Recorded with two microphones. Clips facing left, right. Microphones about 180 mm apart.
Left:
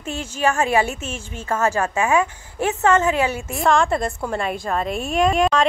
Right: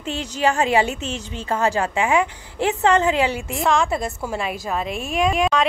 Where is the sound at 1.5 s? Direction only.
15° right (ahead or behind).